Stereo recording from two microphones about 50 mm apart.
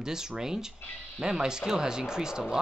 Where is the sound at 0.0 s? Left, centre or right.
Centre.